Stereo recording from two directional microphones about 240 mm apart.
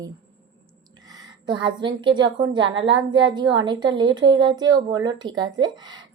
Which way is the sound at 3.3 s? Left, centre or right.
Centre.